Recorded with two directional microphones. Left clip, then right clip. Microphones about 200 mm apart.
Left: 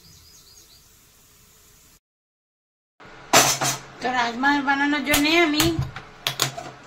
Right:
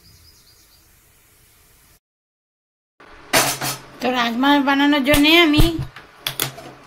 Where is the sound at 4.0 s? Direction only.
55° right (ahead or behind).